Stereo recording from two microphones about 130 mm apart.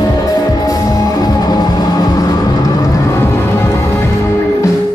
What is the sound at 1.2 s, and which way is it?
Music, 30° left (ahead or behind).